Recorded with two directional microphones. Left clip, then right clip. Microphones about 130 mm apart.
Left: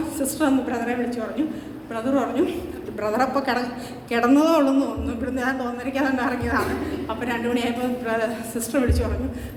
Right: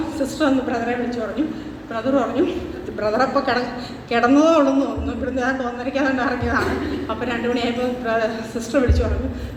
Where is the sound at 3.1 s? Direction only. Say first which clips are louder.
Right 3 dB; 50° left (ahead or behind).